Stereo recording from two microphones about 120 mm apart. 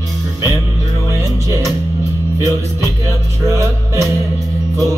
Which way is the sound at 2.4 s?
30° left (ahead or behind).